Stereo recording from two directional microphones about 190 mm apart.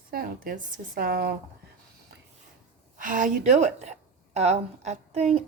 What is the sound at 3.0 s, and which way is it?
A woman's voice, 45° right (ahead or behind).